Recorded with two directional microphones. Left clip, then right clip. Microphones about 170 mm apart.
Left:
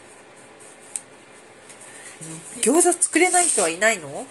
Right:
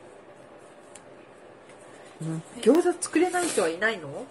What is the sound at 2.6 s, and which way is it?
Speech, 30° left (ahead or behind).